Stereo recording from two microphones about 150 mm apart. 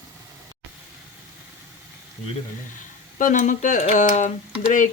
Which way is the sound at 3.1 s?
60° left (ahead or behind).